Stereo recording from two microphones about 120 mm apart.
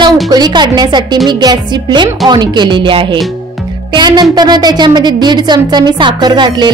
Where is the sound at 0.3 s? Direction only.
35° right (ahead or behind).